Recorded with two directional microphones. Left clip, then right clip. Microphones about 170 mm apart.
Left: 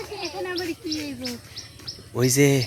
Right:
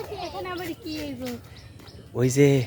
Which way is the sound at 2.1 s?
15° right (ahead or behind).